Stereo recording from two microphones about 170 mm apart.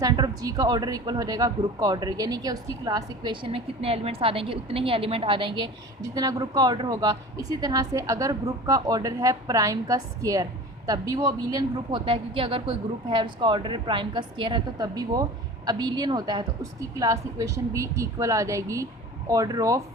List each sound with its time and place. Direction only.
0.0 s speech: 25° right (ahead or behind)